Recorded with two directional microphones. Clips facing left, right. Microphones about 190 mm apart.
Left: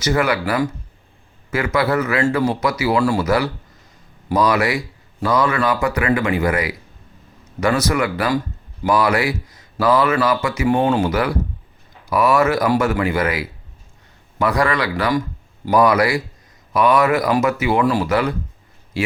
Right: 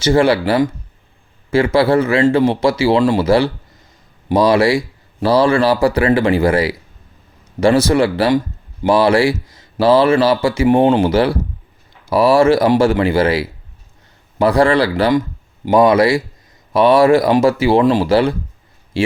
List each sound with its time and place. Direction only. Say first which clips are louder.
0.0 s speech: right 6 dB; 30° right (ahead or behind)